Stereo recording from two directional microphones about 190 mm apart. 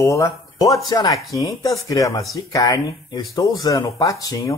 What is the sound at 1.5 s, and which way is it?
Speech, 20° left (ahead or behind).